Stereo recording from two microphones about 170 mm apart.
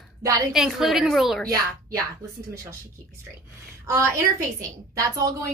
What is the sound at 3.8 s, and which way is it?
A woman's voice, 15° right (ahead or behind).